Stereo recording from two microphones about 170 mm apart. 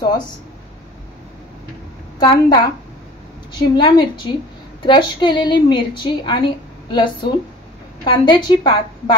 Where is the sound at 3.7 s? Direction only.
25° left (ahead or behind).